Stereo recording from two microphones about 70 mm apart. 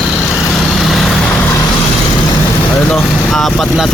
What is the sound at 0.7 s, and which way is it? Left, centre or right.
Vehicle, centre.